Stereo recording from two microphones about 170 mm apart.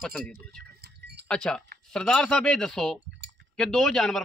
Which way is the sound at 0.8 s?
70° right (ahead or behind).